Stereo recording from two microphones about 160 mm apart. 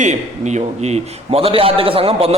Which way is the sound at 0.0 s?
45° right (ahead or behind).